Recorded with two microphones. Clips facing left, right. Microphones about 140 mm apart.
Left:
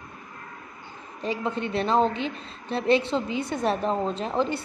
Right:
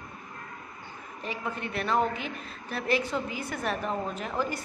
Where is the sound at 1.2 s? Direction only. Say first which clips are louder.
Left 7 dB; 30° left (ahead or behind).